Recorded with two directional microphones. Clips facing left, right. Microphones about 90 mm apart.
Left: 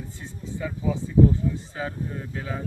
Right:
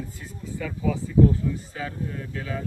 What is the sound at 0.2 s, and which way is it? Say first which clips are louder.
Speech: left 3 dB; 25° left (ahead or behind).